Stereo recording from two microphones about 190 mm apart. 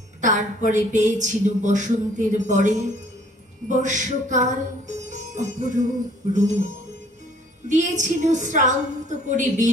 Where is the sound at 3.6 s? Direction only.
40° right (ahead or behind).